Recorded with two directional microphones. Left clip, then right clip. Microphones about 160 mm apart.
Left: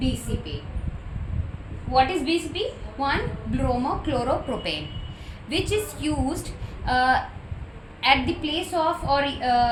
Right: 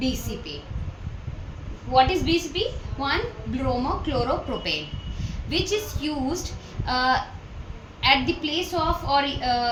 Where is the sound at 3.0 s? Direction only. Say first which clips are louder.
Left 1 dB; 20° left (ahead or behind).